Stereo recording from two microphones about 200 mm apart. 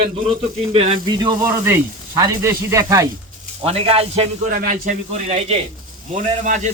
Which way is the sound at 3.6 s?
30° right (ahead or behind).